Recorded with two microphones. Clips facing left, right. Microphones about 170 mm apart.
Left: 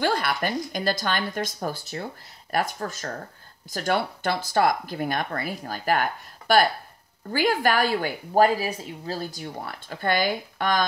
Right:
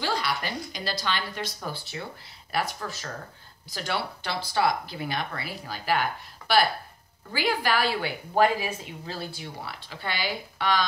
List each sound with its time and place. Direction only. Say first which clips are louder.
0.0 s a woman's voice: left 5 dB; 55° left (ahead or behind)